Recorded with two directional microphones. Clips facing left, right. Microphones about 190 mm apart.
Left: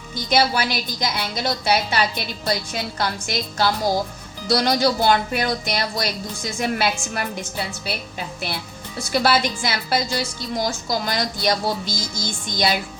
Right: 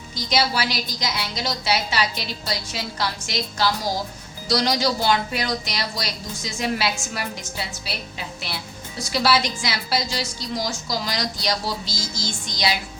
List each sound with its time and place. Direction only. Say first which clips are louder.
0.3 s a woman's voice: left 3 dB; 50° left (ahead or behind)
9.0 s a woman's voice: left 2 dB; 50° left (ahead or behind)